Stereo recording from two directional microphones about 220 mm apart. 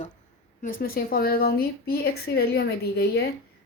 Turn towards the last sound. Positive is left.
turn(degrees=45)  # may be behind; listen again after turning